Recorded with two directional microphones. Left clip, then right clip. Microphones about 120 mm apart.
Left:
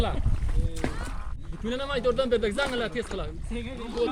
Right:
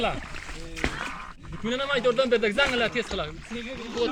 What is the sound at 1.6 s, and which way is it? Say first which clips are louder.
A man's voice: right 3 dB; 30° right (ahead or behind).